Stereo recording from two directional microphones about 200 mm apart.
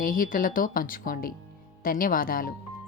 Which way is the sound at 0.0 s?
45° left (ahead or behind).